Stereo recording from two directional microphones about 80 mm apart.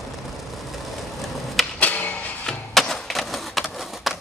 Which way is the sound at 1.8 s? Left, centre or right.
Centre.